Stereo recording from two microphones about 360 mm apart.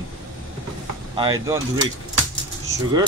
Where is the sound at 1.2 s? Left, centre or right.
Centre.